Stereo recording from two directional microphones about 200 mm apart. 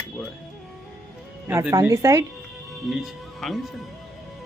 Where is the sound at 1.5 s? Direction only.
15° right (ahead or behind).